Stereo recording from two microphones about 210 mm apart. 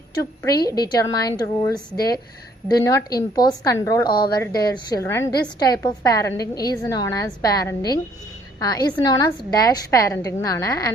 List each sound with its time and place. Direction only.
0.6 s a woman's voice: 20° left (ahead or behind)